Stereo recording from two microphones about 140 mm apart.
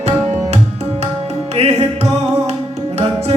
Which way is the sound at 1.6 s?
45° right (ahead or behind).